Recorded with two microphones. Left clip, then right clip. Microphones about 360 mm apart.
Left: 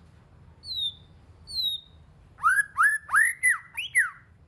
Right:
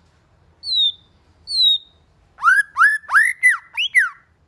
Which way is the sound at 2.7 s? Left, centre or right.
Centre.